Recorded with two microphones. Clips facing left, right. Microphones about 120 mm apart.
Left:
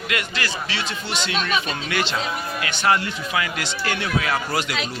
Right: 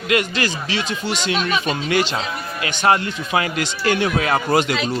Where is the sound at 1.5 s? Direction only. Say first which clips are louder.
Right 4 dB; 35° right (ahead or behind).